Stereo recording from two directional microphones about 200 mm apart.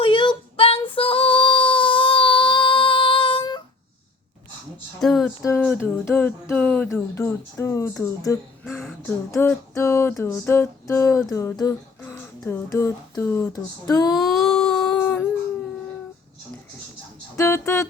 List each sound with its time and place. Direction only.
0.0 s female singing: 25° left (ahead or behind)
4.9 s music: centre (ahead or behind)
8.8 s a sound: 5° left (ahead or behind)
9.3 s music: 15° left (ahead or behind)
14.2 s a sound: centre (ahead or behind)
17.3 s music: 15° left (ahead or behind)